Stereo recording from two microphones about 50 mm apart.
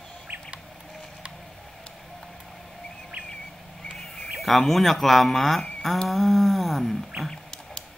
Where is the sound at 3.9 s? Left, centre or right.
Centre.